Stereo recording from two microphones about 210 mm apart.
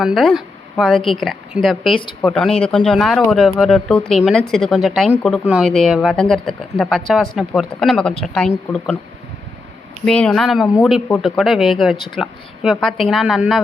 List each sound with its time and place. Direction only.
0.0 s speech: centre (ahead or behind)
1.8 s speech: 25° left (ahead or behind)
2.2 s speech: centre (ahead or behind)
2.5 s speech: 25° left (ahead or behind)
2.7 s speech: 5° left (ahead or behind)
10.1 s speech: 5° left (ahead or behind)